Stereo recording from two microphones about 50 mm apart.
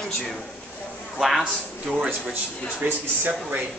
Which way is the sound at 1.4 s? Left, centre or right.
Centre.